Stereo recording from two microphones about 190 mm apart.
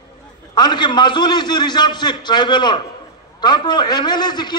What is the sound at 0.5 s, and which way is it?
A man's voice, 20° left (ahead or behind).